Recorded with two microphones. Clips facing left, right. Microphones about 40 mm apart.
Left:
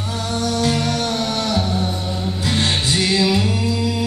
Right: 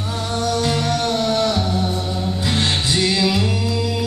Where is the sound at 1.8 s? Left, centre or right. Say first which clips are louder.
Right 1 dB; centre.